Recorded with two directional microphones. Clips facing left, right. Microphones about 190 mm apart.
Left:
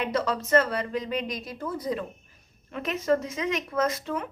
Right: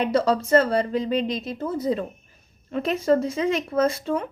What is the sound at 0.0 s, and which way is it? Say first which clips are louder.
A woman's voice: right 6 dB; 30° right (ahead or behind).